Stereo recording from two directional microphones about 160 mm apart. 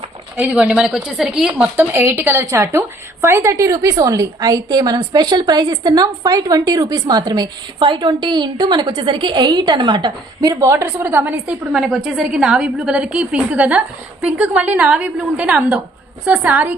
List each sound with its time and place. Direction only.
0.3 s speech: 10° right (ahead or behind)